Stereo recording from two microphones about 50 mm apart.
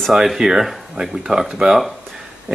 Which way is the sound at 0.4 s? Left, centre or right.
Centre.